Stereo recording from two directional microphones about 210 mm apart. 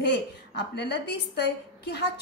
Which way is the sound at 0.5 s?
50° left (ahead or behind).